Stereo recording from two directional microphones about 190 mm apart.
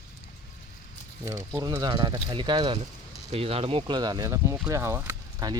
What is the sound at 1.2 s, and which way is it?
Speech, 15° right (ahead or behind).